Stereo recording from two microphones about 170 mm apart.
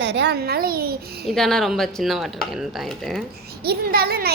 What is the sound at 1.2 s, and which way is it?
Speech, centre (ahead or behind).